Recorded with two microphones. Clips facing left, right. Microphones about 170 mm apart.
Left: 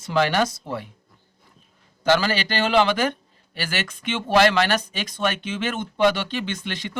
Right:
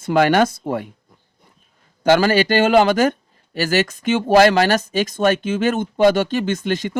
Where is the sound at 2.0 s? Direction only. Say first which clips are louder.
Right 6 dB; 50° right (ahead or behind).